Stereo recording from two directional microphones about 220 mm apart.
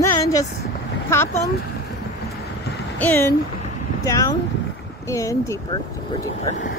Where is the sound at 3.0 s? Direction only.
10° left (ahead or behind).